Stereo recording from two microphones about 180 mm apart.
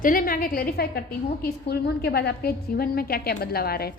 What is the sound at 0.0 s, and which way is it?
A woman's voice, 50° left (ahead or behind).